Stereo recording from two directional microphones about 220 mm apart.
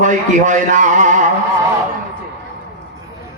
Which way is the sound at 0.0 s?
35° right (ahead or behind).